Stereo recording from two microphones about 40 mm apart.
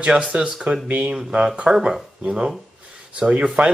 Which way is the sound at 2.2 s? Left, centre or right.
Right.